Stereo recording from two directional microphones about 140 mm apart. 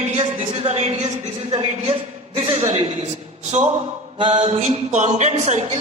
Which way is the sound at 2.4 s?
50° right (ahead or behind).